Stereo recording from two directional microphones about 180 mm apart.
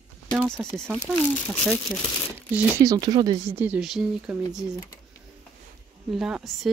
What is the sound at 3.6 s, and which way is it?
Speech, 5° right (ahead or behind).